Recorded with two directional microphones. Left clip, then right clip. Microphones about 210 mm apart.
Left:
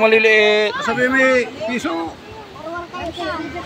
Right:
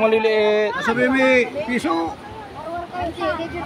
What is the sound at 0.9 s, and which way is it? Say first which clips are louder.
A man's voice: left 1 dB; 30° right (ahead or behind).